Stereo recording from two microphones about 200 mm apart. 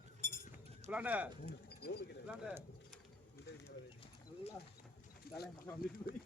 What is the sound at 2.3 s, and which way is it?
Speech, 5° right (ahead or behind).